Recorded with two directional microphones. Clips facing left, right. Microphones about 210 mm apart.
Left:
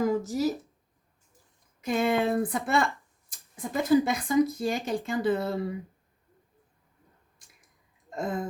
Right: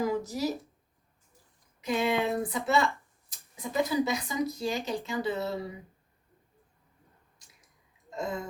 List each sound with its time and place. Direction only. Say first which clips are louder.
0.0 s speech: left 4 dB; 45° left (ahead or behind)
1.8 s speech: left 2 dB; 50° left (ahead or behind)
8.1 s speech: left 3 dB; 55° left (ahead or behind)